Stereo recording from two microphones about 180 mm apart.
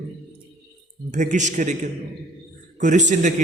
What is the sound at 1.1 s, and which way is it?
A man's voice, 45° right (ahead or behind).